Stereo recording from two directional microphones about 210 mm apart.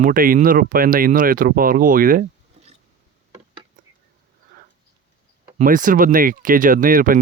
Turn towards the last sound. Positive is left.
turn(degrees=-40)  # may be behind; listen again after turning